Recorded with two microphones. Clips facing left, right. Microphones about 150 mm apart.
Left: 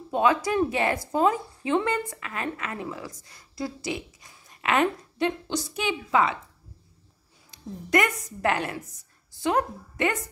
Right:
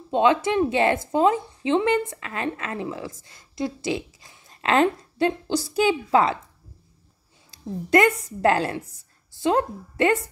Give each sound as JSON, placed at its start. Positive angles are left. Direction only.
{"t": 0.1, "sound": "speech", "side_deg": -25}
{"t": 7.5, "sound": "speech", "side_deg": -30}